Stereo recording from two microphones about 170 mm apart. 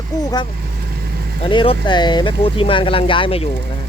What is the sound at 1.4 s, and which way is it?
Speech, 30° left (ahead or behind).